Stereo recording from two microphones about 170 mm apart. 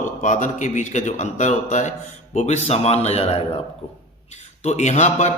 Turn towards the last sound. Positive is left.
turn(degrees=45)  # may be behind; listen again after turning